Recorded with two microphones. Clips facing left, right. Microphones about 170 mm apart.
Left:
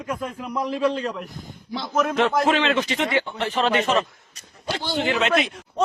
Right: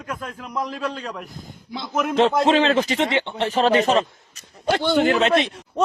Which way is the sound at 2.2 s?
25° right (ahead or behind).